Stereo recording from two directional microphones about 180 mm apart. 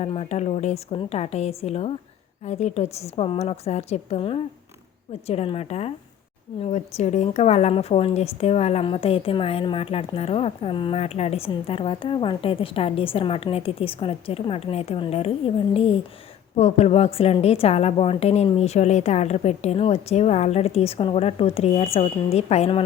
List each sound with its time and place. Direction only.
0.0 s a woman's voice: 35° left (ahead or behind)